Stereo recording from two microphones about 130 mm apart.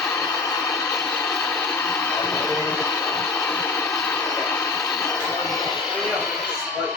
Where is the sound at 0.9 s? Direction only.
5° left (ahead or behind).